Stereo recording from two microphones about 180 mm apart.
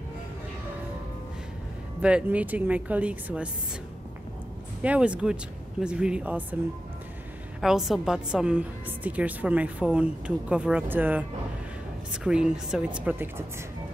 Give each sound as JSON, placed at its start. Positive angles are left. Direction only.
{"t": 2.0, "sound": "a woman's voice", "side_deg": -5}
{"t": 4.8, "sound": "speech", "side_deg": -5}
{"t": 7.6, "sound": "a woman's voice", "side_deg": 0}